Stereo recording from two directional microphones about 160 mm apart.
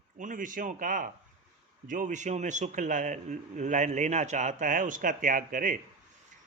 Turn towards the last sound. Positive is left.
turn(degrees=-55)  # may be behind; listen again after turning